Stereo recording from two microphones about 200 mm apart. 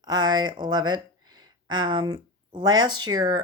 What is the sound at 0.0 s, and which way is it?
Speech, 20° right (ahead or behind).